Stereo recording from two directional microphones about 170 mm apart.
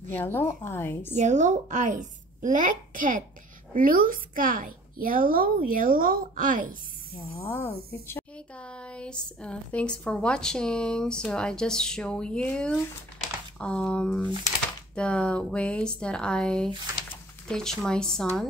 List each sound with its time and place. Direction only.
0.1 s a woman's voice: 10° left (ahead or behind)
1.1 s a woman's voice: 45° right (ahead or behind)
7.4 s speech: 15° left (ahead or behind)